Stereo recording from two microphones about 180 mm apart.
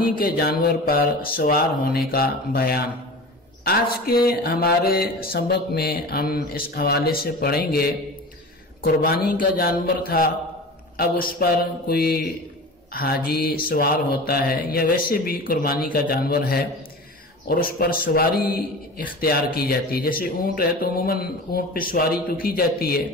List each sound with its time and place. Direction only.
0.0 s a man's voice: 55° left (ahead or behind)